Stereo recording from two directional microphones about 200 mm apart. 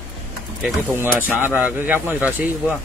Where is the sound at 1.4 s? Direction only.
5° right (ahead or behind).